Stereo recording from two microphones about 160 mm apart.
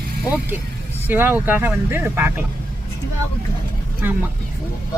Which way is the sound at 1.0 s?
10° right (ahead or behind).